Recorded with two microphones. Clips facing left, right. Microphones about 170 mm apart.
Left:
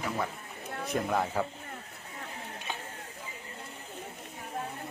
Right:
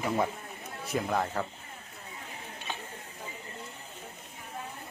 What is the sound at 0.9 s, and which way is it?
Speech, centre (ahead or behind).